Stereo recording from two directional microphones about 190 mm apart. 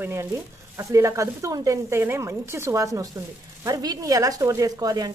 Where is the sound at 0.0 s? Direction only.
15° right (ahead or behind).